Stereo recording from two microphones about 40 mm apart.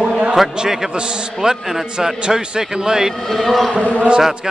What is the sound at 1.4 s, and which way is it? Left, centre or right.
A man's voice, centre.